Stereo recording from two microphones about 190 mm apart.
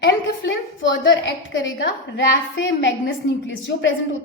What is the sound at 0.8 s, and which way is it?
A woman's voice, 80° left.